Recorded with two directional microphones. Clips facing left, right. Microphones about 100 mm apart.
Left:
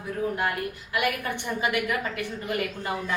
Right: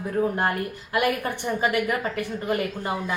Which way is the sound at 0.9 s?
40° right (ahead or behind).